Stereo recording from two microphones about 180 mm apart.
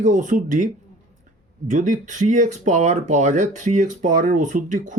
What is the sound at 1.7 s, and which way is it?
Speech, 45° right (ahead or behind).